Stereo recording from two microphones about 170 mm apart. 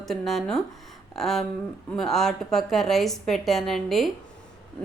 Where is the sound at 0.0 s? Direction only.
Centre (ahead or behind).